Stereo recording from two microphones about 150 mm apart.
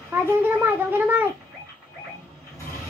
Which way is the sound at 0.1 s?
10° right (ahead or behind).